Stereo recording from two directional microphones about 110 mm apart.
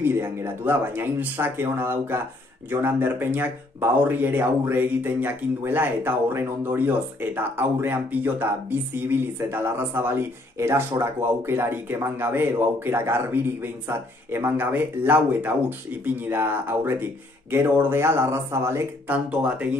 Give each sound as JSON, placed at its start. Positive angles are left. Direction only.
{"t": 0.0, "sound": "speech", "side_deg": -20}